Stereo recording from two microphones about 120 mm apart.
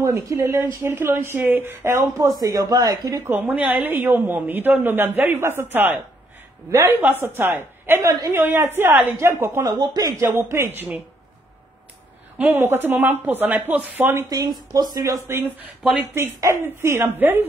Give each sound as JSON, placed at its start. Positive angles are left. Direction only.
{"t": 0.0, "sound": "a woman's voice", "side_deg": -25}
{"t": 2.4, "sound": "speech", "side_deg": -30}
{"t": 3.3, "sound": "a woman's voice", "side_deg": -15}
{"t": 8.1, "sound": "speech", "side_deg": -30}
{"t": 8.4, "sound": "a woman's voice", "side_deg": -20}
{"t": 9.8, "sound": "speech", "side_deg": -30}
{"t": 10.2, "sound": "a woman's voice", "side_deg": -20}
{"t": 12.4, "sound": "a woman's voice", "side_deg": -15}
{"t": 15.8, "sound": "a woman's voice", "side_deg": -15}